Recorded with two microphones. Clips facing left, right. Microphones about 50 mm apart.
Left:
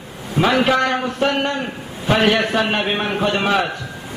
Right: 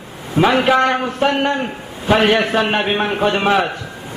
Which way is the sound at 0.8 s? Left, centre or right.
Right.